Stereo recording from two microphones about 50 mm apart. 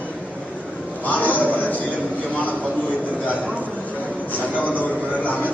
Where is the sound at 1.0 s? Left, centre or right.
Left.